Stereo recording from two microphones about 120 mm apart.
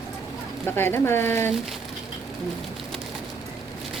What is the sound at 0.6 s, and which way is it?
Speech, 20° left (ahead or behind).